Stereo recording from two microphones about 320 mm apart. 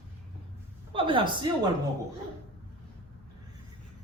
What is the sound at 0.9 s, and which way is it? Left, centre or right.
Speech, centre.